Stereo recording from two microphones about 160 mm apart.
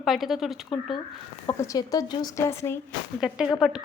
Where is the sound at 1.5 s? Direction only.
20° left (ahead or behind).